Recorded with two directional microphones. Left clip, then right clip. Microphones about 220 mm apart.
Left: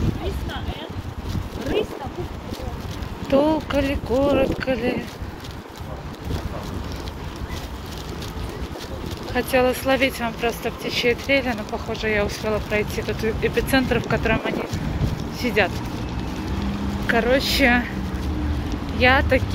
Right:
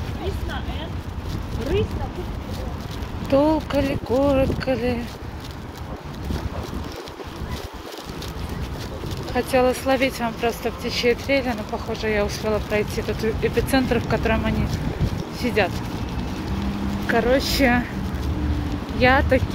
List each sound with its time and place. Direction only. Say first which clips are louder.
3.3 s speech: even; 10° right (ahead or behind)
9.3 s speech: even; 10° right (ahead or behind)
17.1 s speech: left 1 dB; 10° right (ahead or behind)
18.9 s speech: even; 15° right (ahead or behind)